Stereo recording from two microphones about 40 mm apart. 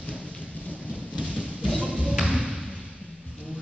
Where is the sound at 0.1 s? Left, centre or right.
Left.